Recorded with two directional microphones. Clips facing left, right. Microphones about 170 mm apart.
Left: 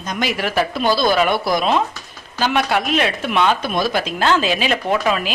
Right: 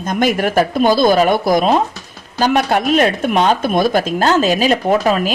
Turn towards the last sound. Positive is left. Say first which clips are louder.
# right 5 dB
turn(degrees=-40)  # may be behind; listen again after turning